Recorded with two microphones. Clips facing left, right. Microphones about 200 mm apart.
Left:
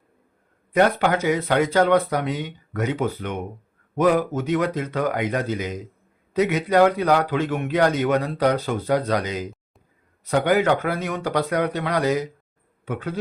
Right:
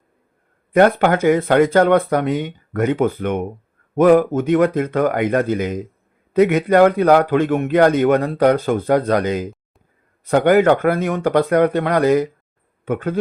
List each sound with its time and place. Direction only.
0.7 s a man's voice: 50° right (ahead or behind)